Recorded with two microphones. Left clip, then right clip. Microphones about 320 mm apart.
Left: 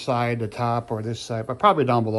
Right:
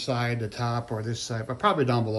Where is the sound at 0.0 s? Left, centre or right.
Centre.